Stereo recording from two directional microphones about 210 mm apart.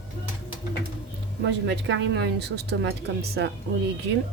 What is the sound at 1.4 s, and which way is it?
Speech, 60° right (ahead or behind).